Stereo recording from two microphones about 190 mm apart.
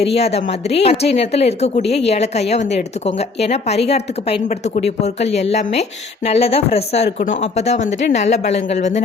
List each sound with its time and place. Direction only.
0.0 s a woman's voice: 35° left (ahead or behind)